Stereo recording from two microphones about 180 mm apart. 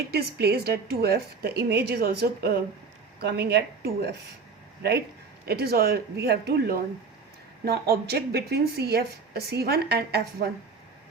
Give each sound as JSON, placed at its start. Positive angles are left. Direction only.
{"t": 0.1, "sound": "a woman's voice", "side_deg": -60}